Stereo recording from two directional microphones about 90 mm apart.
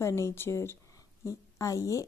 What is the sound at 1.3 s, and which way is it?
Speech, 40° left (ahead or behind).